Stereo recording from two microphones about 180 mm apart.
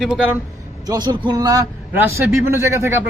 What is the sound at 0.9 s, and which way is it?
A man's voice, 25° right (ahead or behind).